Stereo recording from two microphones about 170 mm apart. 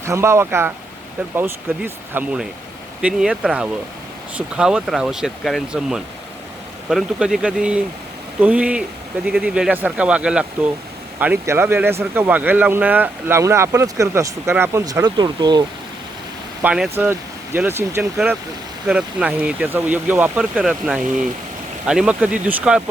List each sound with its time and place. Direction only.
0.0 s speech: 15° right (ahead or behind)
16.6 s speech: 5° right (ahead or behind)